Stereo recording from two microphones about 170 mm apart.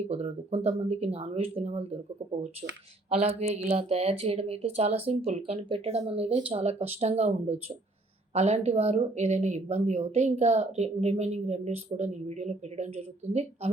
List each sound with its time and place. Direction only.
0.1 s a woman's voice: 40° right (ahead or behind)